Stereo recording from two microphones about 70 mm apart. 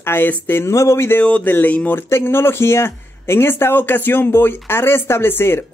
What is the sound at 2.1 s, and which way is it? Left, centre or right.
A man's voice, left.